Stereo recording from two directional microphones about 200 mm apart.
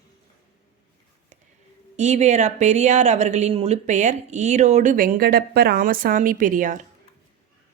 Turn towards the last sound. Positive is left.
turn(degrees=-40)  # may be behind; listen again after turning